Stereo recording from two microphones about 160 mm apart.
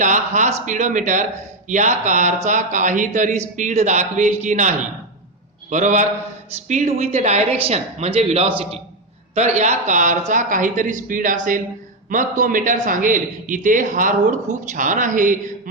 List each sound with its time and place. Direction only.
0.0 s a man's voice: 50° right (ahead or behind)